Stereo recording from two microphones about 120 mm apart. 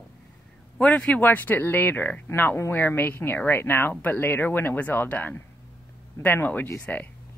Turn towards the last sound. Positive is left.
turn(degrees=15)  # may be behind; listen again after turning